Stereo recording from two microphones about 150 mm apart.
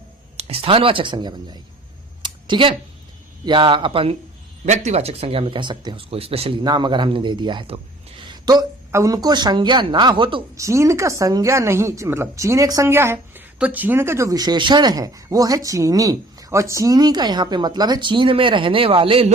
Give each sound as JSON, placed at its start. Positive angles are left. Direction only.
{"t": 0.3, "sound": "speech", "side_deg": -40}
{"t": 2.2, "sound": "a sound", "side_deg": -35}
{"t": 3.4, "sound": "speech", "side_deg": -30}
{"t": 4.6, "sound": "speech", "side_deg": -50}
{"t": 10.6, "sound": "speech", "side_deg": -20}